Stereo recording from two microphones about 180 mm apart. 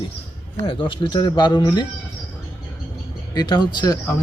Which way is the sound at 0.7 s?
25° left (ahead or behind).